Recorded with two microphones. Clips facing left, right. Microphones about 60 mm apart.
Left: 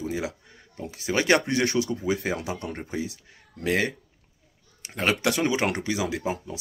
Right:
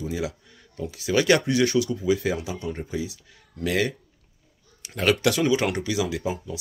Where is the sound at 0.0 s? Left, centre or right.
Left.